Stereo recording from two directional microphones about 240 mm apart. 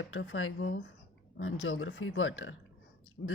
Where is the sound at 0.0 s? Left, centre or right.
Left.